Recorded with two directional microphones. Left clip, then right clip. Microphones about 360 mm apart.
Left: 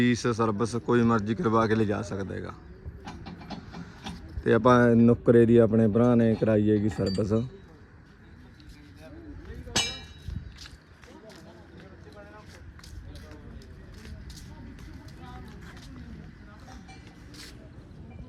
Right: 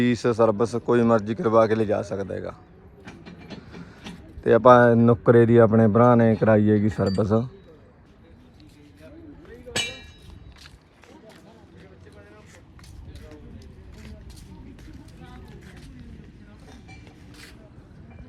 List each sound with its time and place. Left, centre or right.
0.2 s a man's voice: centre
4.4 s speech: centre
9.7 s a sound: left